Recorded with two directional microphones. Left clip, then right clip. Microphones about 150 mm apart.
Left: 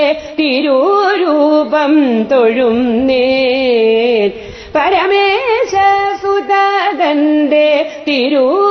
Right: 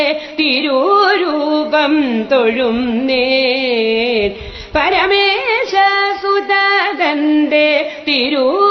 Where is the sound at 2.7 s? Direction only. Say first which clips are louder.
Left 4 dB; 25° left (ahead or behind).